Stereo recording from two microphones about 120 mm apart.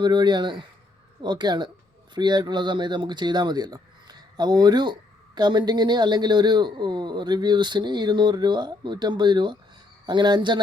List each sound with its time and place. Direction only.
0.0 s speech: 35° right (ahead or behind)